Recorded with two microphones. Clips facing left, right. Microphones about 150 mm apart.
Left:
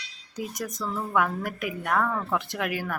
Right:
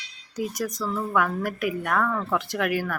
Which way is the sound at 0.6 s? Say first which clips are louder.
Right 2 dB; 20° left (ahead or behind).